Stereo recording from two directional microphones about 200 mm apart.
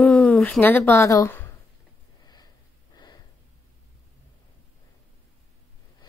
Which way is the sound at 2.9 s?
20° left (ahead or behind).